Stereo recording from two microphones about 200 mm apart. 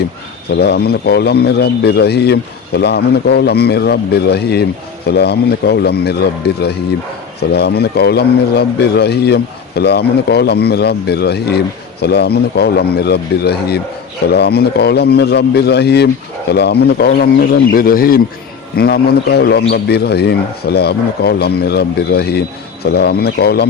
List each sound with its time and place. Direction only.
0.5 s a man's voice: 55° left (ahead or behind)